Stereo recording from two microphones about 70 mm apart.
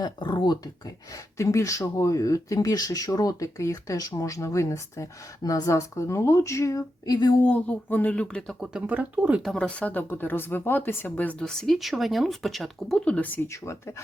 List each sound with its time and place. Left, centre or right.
0.0 s speech: left
1.4 s speech: left
3.1 s speech: left
4.1 s speech: left
5.4 s speech: left
5.6 s speech: left
7.4 s speech: left
8.1 s speech: centre
8.9 s speech: right
9.6 s speech: centre
11.4 s speech: centre
13.1 s speech: left
13.5 s speech: left